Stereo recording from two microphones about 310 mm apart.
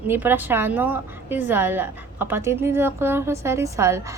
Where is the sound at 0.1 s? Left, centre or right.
Centre.